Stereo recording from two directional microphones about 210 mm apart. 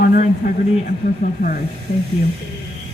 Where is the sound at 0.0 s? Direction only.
40° left (ahead or behind).